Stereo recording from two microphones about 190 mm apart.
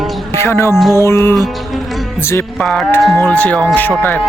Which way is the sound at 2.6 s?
5° left (ahead or behind).